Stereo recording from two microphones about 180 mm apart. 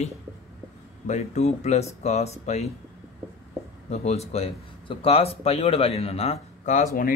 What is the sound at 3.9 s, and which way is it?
Speech, 35° left (ahead or behind).